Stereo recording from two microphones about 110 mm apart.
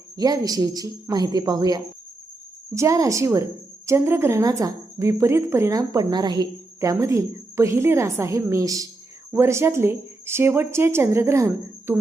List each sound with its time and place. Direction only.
0.2 s a woman's voice: 35° right (ahead or behind)
6.7 s a woman's voice: 25° right (ahead or behind)